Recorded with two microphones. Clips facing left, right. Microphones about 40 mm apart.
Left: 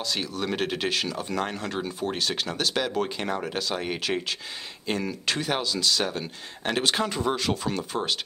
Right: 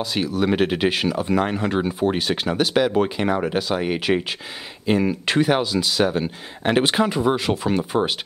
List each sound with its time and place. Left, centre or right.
0.0 s speech: centre